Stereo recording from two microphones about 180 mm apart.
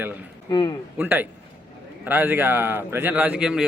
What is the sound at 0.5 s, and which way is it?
Speech, 25° left (ahead or behind).